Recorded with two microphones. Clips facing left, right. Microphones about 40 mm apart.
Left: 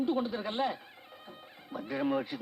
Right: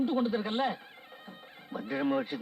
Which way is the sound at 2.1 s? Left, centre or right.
Right.